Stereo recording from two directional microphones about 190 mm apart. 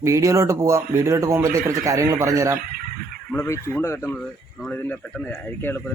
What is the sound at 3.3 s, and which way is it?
A man's voice, 15° left (ahead or behind).